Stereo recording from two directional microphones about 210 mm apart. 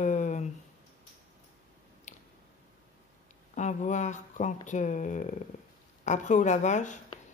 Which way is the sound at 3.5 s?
35° left (ahead or behind).